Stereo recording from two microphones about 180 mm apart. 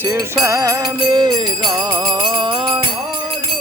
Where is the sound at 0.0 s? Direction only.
15° right (ahead or behind).